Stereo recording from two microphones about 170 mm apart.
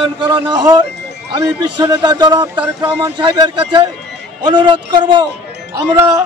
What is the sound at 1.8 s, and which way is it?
A man's voice, 25° right (ahead or behind).